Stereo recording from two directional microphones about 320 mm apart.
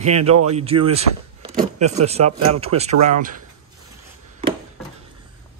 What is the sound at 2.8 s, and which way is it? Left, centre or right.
Speech, right.